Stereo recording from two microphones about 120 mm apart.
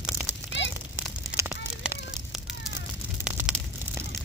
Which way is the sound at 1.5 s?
10° right (ahead or behind).